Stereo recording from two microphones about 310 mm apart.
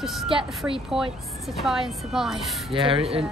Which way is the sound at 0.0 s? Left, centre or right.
Centre.